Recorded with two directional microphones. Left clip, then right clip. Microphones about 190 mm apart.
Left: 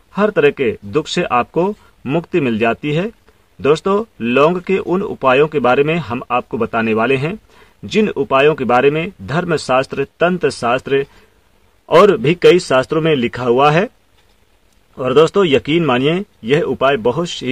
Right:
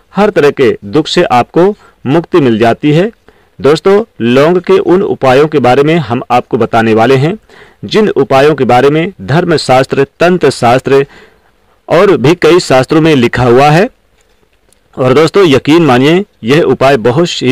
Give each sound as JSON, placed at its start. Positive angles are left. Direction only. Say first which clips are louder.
{"t": 0.1, "sound": "speech", "louder": "right 6 dB", "side_deg": -35}
{"t": 15.0, "sound": "speech", "louder": "right 6 dB", "side_deg": -40}